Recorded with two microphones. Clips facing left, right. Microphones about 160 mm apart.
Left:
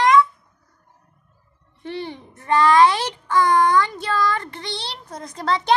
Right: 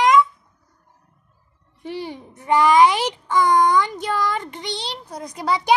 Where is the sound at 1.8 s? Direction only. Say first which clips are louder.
Even; 10° right (ahead or behind).